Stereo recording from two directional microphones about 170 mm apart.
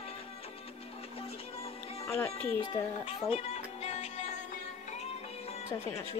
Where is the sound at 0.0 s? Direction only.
35° left (ahead or behind).